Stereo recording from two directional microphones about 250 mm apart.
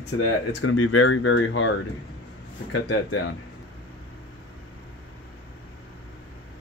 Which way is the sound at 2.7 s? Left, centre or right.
Left.